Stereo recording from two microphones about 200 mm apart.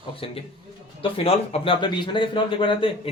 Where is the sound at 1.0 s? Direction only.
30° left (ahead or behind).